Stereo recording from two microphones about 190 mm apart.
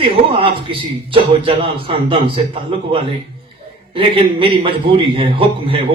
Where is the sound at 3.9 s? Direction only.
30° right (ahead or behind).